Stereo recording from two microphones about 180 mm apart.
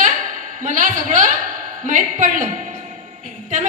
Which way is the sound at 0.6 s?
45° right (ahead or behind).